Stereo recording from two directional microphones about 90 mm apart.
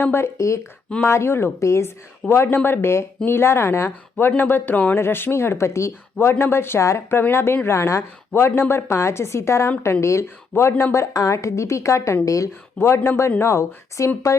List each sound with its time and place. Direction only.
0.0 s a woman's voice: 25° left (ahead or behind)